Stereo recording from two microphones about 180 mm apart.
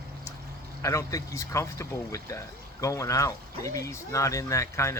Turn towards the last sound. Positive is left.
turn(degrees=15)  # may be behind; listen again after turning